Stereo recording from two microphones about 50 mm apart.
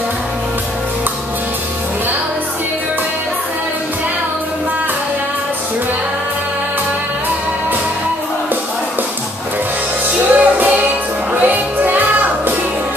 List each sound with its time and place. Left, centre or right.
10.3 s music: right